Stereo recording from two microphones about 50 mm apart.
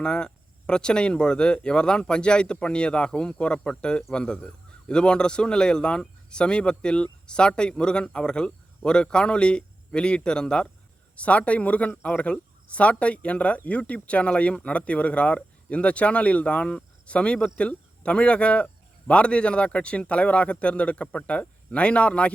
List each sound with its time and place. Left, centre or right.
0.0 s a man's voice: centre
11.2 s a man's voice: left